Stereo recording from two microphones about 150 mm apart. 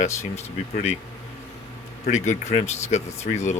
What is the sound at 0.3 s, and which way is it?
Speech, 45° left (ahead or behind).